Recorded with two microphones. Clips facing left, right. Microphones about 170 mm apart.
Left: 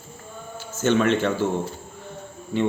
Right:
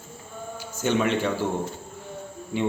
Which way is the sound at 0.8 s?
15° right (ahead or behind).